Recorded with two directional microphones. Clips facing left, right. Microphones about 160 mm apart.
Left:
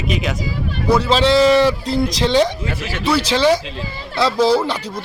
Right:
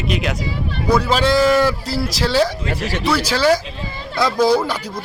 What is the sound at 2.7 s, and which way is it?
Speech, 40° right (ahead or behind).